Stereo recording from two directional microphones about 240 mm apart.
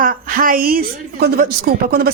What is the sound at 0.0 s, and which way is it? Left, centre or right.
A woman's voice, right.